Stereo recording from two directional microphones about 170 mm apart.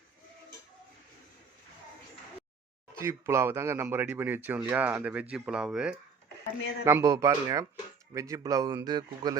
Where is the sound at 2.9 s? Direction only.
15° right (ahead or behind).